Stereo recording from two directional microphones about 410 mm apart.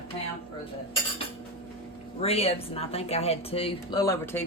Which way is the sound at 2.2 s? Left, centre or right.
Centre.